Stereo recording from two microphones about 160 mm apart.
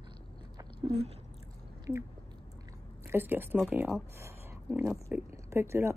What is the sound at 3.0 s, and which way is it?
Speech, 10° right (ahead or behind).